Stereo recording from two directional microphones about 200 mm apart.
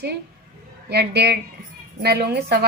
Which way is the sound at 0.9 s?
55° right (ahead or behind).